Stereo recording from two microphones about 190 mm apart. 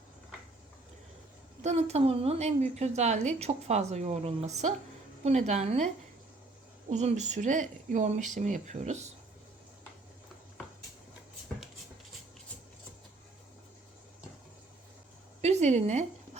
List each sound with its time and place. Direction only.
1.6 s a woman's voice: 35° right (ahead or behind)
6.9 s a woman's voice: 35° right (ahead or behind)
15.4 s a sound: 35° right (ahead or behind)